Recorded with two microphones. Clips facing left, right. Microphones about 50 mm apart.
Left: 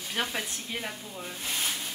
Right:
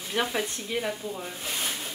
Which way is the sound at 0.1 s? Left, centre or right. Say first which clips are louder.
Right 4 dB; centre.